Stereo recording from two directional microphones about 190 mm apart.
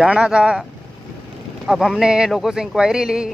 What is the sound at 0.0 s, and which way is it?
Speech, 5° right (ahead or behind).